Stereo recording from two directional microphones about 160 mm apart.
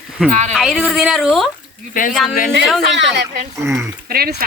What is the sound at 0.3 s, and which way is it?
Speech, 45° right (ahead or behind).